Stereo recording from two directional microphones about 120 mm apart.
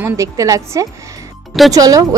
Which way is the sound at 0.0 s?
25° right (ahead or behind).